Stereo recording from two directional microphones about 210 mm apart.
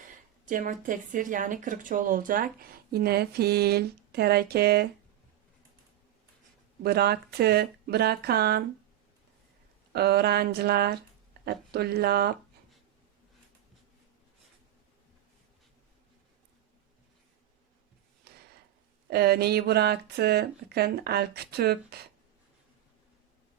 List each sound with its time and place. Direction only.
0.4 s speech: 40° right (ahead or behind)
6.8 s speech: 50° right (ahead or behind)
9.9 s speech: 50° right (ahead or behind)
18.3 s a sound: 50° right (ahead or behind)
19.1 s speech: 50° right (ahead or behind)